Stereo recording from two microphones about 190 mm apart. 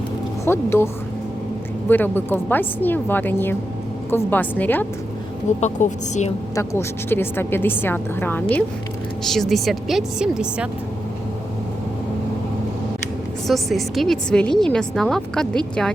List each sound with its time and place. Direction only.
0.4 s a woman's voice: 10° left (ahead or behind)
1.9 s a woman's voice: 10° left (ahead or behind)
5.5 s a woman's voice: 40° left (ahead or behind)
6.6 s a woman's voice: 10° left (ahead or behind); by 10.7 s 5° right (ahead or behind)
13.5 s a woman's voice: centre (ahead or behind)